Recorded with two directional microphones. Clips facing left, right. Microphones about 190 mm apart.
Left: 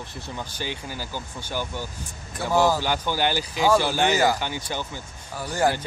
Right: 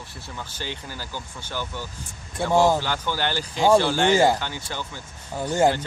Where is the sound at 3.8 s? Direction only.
15° left (ahead or behind).